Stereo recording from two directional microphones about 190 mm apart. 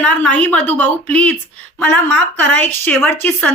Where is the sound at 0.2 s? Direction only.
10° left (ahead or behind).